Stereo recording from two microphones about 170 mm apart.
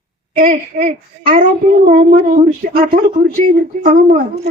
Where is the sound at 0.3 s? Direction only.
55° right (ahead or behind).